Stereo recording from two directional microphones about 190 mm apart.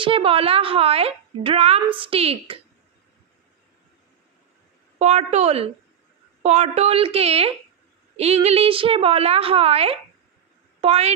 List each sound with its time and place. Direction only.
0.0 s speech: 30° right (ahead or behind)
4.9 s a woman's voice: 35° right (ahead or behind)